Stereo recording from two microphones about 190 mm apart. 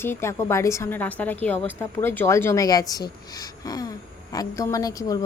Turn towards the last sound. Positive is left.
turn(degrees=20)  # may be behind; listen again after turning